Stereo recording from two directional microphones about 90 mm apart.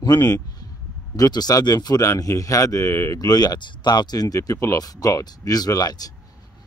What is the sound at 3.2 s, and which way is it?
Speech, 45° left (ahead or behind).